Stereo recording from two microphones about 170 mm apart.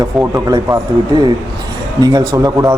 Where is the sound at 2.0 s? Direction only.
25° right (ahead or behind).